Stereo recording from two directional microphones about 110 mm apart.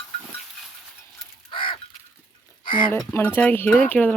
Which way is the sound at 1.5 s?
50° left (ahead or behind).